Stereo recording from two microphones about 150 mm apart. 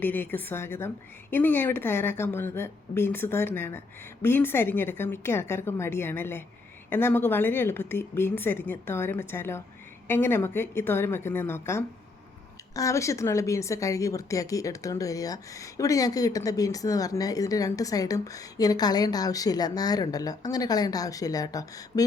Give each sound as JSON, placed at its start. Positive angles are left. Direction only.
{"t": 0.0, "sound": "a woman's voice", "side_deg": 10}